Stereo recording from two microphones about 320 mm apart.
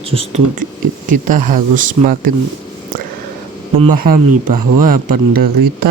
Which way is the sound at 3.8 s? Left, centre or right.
Right.